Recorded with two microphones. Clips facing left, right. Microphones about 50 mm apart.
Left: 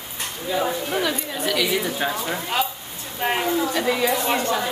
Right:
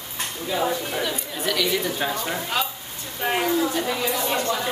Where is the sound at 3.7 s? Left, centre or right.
Left.